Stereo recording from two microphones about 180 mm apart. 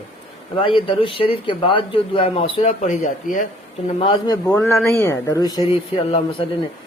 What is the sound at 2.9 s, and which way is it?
Speech, 50° left (ahead or behind).